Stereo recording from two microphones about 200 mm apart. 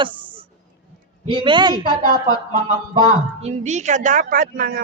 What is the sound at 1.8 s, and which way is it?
Speech, 20° left (ahead or behind).